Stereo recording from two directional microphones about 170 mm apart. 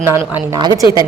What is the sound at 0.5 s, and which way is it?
Speech, 20° right (ahead or behind).